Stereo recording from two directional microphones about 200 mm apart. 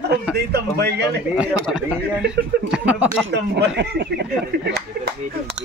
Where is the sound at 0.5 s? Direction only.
55° right (ahead or behind).